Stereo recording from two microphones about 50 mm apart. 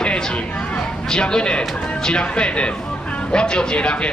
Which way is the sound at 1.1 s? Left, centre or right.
Centre.